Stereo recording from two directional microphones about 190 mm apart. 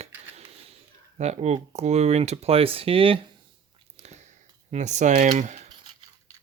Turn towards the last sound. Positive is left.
turn(degrees=-40)  # may be behind; listen again after turning